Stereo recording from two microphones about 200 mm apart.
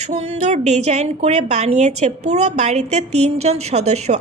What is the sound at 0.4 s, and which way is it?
Speech, 35° right (ahead or behind).